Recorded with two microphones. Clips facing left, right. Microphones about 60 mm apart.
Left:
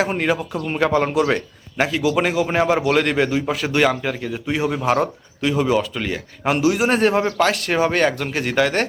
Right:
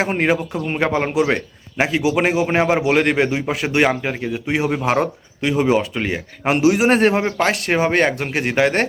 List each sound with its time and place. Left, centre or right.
0.0 s a man's voice: right